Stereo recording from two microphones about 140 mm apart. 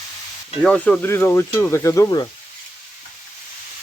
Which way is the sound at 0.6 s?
10° left (ahead or behind).